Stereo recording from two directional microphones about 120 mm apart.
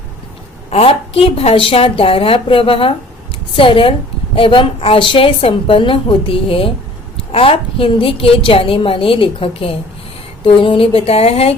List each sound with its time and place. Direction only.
0.7 s a woman's voice: 55° left (ahead or behind)